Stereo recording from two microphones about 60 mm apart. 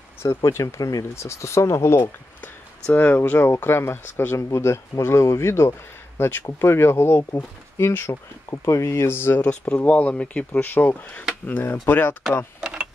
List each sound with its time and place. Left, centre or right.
0.2 s speech: left
0.7 s speech: left
1.1 s speech: left
2.0 s a sound: left
3.2 s speech: left
4.4 s speech: left
9.4 s speech: left
11.6 s speech: left
12.5 s mechanisms: centre